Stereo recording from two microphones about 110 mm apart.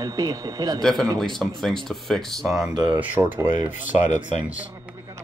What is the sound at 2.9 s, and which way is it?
Speech, 20° right (ahead or behind).